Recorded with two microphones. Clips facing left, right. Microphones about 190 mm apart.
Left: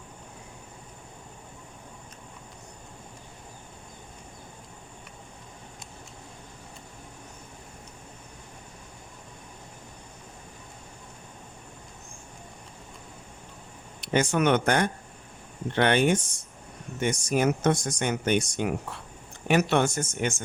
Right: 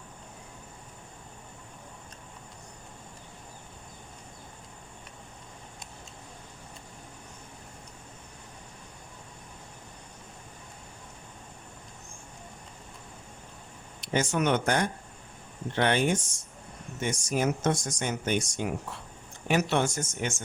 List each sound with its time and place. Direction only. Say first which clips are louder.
14.0 s speech: left 3 dB; 65° left (ahead or behind)